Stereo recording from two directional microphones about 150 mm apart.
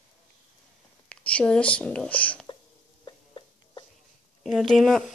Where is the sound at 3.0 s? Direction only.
30° left (ahead or behind).